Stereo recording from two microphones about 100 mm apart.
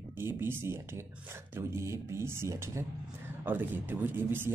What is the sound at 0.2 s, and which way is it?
Speech, 25° right (ahead or behind).